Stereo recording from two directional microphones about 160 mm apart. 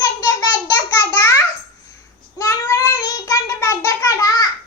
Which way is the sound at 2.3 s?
20° left (ahead or behind).